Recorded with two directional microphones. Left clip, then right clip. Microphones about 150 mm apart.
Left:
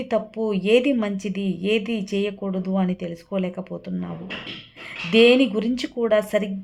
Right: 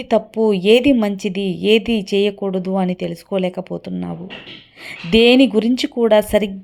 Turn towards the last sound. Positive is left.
turn(degrees=-30)  # may be behind; listen again after turning